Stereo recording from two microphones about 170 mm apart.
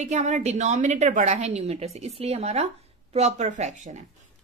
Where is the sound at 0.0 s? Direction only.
40° right (ahead or behind).